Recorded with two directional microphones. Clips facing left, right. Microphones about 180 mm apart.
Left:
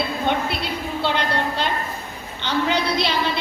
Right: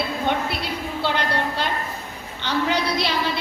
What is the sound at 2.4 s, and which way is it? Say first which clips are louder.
Speech: left 1 dB; 25° left (ahead or behind).